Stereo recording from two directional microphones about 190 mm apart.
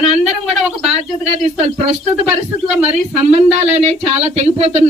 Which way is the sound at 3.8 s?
35° right (ahead or behind).